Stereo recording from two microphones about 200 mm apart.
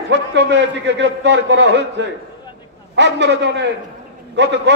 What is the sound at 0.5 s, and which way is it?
A man's voice, 60° right (ahead or behind).